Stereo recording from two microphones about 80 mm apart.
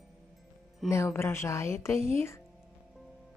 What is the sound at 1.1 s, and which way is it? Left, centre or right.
A woman's voice, left.